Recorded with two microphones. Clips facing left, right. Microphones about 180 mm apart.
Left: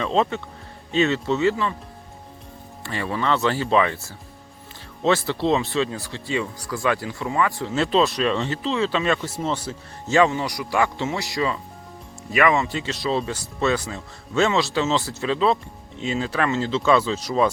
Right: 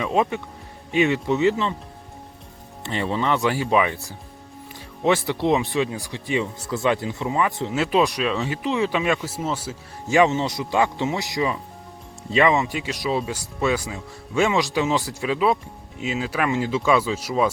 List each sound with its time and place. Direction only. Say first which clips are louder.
0.0 s speech: even; 10° right (ahead or behind)
2.8 s speech: right 1 dB; 20° right (ahead or behind); by 8.5 s 5° right (ahead or behind)
8.6 s speech: right 1 dB; 15° right (ahead or behind)